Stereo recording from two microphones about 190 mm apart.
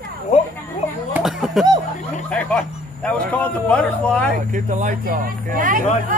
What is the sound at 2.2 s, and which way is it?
A man's voice, 5° left (ahead or behind).